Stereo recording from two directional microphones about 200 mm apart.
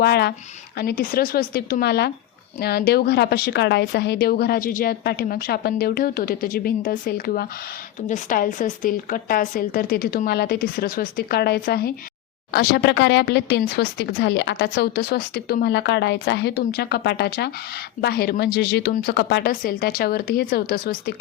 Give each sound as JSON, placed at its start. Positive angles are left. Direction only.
{"t": 0.0, "sound": "a woman's voice", "side_deg": 55}